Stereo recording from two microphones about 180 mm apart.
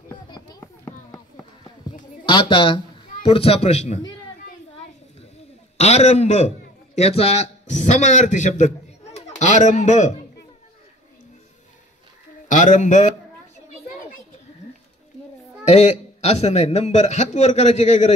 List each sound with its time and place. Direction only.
0.3 s a sound: 20° left (ahead or behind); by 4.0 s 40° left (ahead or behind)
5.8 s a man's voice: 40° left (ahead or behind)
12.4 s a man's voice: 45° left (ahead or behind)
15.6 s a man's voice: 40° left (ahead or behind)